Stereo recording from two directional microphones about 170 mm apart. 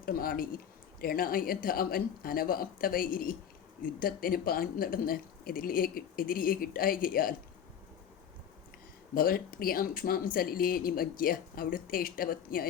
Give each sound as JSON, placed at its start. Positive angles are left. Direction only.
{"t": 0.0, "sound": "speech", "side_deg": 60}
{"t": 9.1, "sound": "speech", "side_deg": 60}